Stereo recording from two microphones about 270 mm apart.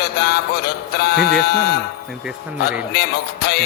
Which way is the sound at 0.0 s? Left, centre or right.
Left.